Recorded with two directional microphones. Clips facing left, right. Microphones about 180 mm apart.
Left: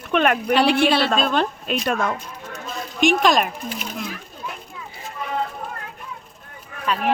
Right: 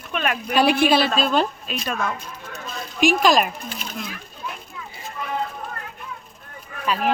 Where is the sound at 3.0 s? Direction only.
Centre (ahead or behind).